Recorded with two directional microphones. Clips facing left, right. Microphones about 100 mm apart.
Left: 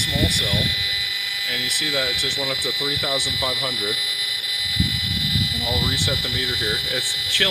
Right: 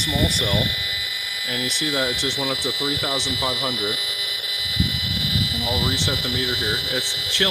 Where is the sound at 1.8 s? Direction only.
30° right (ahead or behind).